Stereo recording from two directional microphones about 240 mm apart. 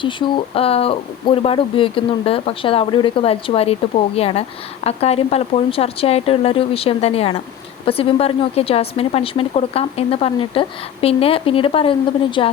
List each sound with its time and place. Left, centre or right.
0.0 s speech: left